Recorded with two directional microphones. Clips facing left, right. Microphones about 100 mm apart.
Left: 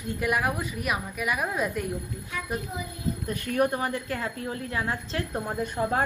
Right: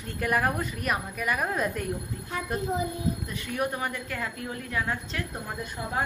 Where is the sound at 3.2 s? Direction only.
45° left (ahead or behind).